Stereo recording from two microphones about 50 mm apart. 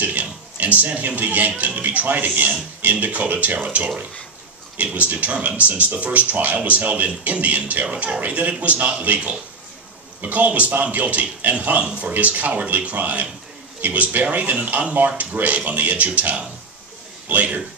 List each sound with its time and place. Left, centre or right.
0.0 s a sound: right
1.6 s speech: right
11.8 s speech: right